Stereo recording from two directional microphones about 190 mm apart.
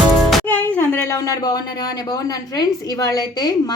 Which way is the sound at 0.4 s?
10° left (ahead or behind).